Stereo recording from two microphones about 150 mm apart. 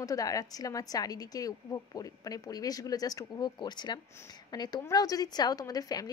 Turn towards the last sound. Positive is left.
turn(degrees=25)  # may be behind; listen again after turning